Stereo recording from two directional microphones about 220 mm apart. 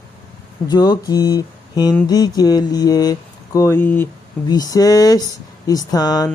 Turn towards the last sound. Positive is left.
turn(degrees=15)  # may be behind; listen again after turning